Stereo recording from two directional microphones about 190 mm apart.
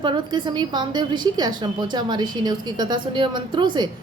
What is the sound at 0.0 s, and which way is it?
A woman's voice, 25° right (ahead or behind).